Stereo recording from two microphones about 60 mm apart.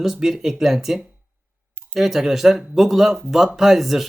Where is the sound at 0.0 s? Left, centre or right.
Centre.